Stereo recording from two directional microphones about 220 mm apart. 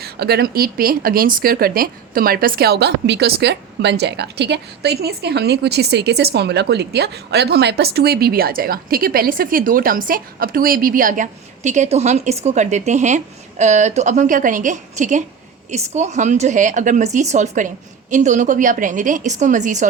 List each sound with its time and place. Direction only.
0.0 s speech: 45° right (ahead or behind)